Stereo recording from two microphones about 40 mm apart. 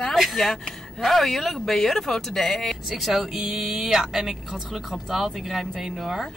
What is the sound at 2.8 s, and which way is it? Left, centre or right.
Speech, centre.